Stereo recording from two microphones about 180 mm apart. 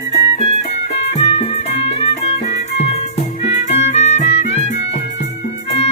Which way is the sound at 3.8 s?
35° left (ahead or behind).